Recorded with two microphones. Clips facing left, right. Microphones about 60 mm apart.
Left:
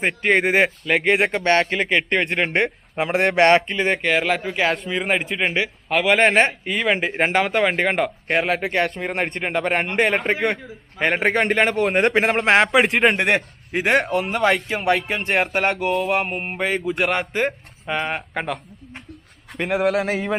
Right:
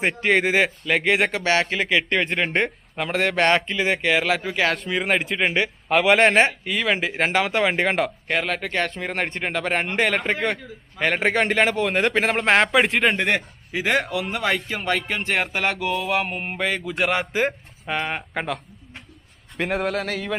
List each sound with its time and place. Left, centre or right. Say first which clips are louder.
0.0 s speech: left 1 dB; centre
2.9 s a man's voice: left 4 dB; centre
3.3 s speech: left 5 dB; centre
5.9 s speech: even; centre
6.5 s speech: left 1 dB; left
7.4 s speech: left 1 dB; centre
13.3 s a man's voice: left 3 dB; left
14.9 s speech: left 3 dB; centre
16.3 s speech: left 2 dB; centre
19.9 s speech: left 5 dB; left